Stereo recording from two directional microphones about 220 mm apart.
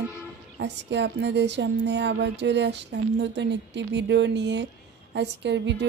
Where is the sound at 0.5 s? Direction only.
50° right (ahead or behind).